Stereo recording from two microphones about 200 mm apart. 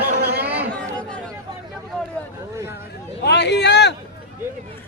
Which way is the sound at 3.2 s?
55° left (ahead or behind).